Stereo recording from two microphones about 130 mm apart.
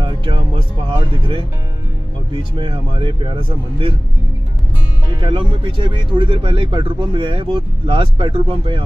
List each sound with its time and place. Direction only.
0.0 s music: 40° right (ahead or behind)
0.8 s speech: 40° right (ahead or behind)
5.2 s speech: 40° right (ahead or behind)